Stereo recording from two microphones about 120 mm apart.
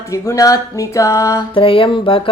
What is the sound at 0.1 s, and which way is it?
Speech, 25° left (ahead or behind).